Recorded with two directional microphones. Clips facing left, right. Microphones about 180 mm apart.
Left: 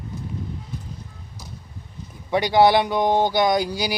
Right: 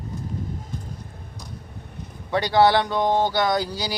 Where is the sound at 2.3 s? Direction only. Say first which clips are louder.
Left 2 dB; 15° left (ahead or behind).